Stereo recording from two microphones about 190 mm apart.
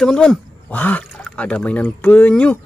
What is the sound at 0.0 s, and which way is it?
Speech, 5° left (ahead or behind).